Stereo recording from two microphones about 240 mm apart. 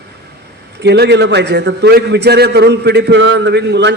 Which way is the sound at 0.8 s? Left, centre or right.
Right.